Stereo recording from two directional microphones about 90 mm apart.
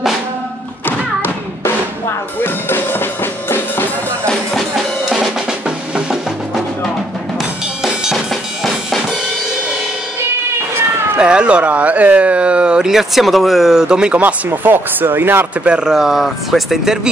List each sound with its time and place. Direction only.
0.8 s music: 25° left (ahead or behind)
4.3 s drum: centre (ahead or behind)
7.3 s drum kit: 5° right (ahead or behind)
11.1 s speech: 10° right (ahead or behind)
15.6 s speech: 10° right (ahead or behind)